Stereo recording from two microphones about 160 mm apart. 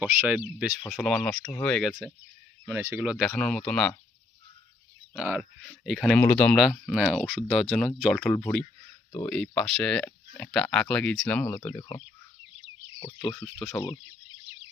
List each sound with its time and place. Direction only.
0.0 s speech: 10° right (ahead or behind)
2.6 s speech: 15° right (ahead or behind); by 3.9 s 5° left (ahead or behind)
5.1 s speech: 5° right (ahead or behind); by 11.5 s 10° left (ahead or behind)
11.5 s speech: 25° left (ahead or behind)
13.3 s speech: 5° left (ahead or behind)